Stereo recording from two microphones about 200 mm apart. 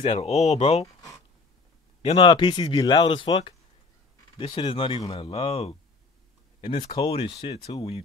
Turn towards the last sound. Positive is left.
turn(degrees=30)  # may be behind; listen again after turning